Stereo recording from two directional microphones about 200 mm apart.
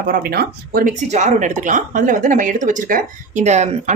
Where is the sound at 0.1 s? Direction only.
45° right (ahead or behind).